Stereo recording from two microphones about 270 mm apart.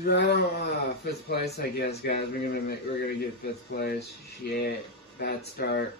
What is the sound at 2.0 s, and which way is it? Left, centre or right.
Speech, left.